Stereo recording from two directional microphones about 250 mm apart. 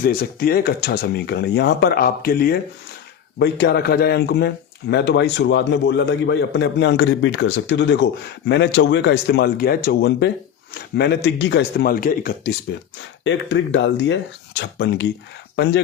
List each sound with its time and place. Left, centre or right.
0.0 s speech: left
13.2 s speech: left